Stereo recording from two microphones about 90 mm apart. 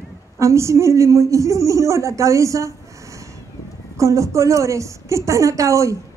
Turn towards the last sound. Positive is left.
turn(degrees=-35)  # may be behind; listen again after turning